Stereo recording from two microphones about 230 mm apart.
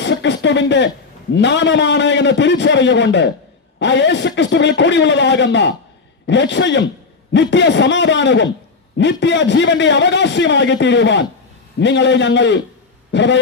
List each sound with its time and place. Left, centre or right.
0.0 s a man's voice: left